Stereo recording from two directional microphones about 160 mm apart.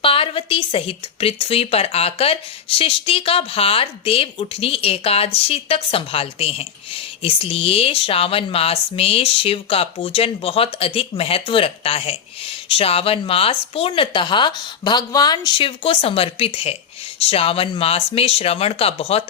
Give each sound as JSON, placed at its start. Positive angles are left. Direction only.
{"t": 0.0, "sound": "speech", "side_deg": 35}